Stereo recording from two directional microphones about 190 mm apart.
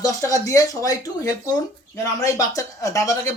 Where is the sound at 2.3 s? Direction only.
15° left (ahead or behind).